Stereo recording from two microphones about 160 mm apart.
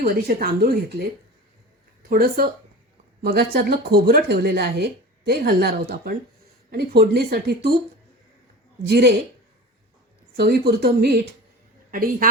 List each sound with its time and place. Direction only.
0.0 s speech: 75° right (ahead or behind)
2.0 s speech: 70° right (ahead or behind); by 7.0 s 85° right
7.1 s speech: 75° right (ahead or behind)
8.9 s a woman's voice: 90° right
10.3 s speech: 80° right
11.9 s a woman's voice: 65° right (ahead or behind)